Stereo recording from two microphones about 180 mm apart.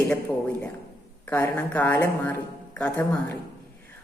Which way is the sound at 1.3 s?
10° left (ahead or behind).